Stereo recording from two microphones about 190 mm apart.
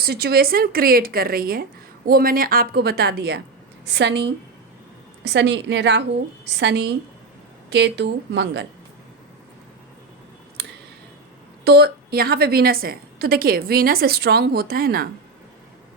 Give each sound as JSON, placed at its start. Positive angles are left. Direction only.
{"t": 0.0, "sound": "a woman's voice", "side_deg": -55}
{"t": 11.6, "sound": "a woman's voice", "side_deg": -60}